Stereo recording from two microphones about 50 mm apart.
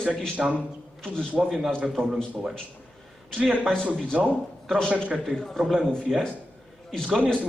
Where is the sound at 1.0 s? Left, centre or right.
Centre.